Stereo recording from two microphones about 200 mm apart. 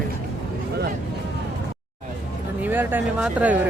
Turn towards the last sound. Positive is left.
turn(degrees=-10)  # may be behind; listen again after turning